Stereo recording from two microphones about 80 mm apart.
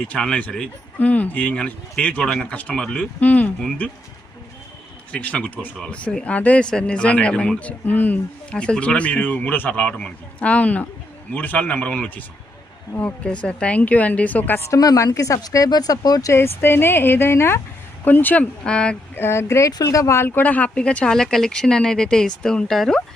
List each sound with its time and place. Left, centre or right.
0.1 s speech: centre
3.0 s a woman's voice: centre
5.1 s speech: centre
5.5 s speech: centre; by 14.6 s left
14.6 s a woman's voice: left
15.4 s speech: left
16.3 s a woman's voice: left
18.6 s speech: centre
19.1 s speech: left; by 23.0 s centre